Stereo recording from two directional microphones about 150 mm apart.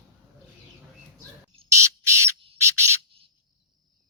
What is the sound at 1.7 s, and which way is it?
Bird, 20° right (ahead or behind).